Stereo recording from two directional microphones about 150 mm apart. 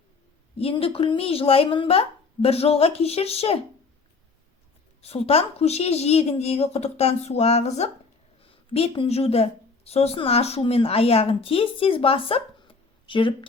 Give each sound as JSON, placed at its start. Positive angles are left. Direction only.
{"t": 0.6, "sound": "a woman's voice", "side_deg": 40}
{"t": 5.0, "sound": "a woman's voice", "side_deg": 40}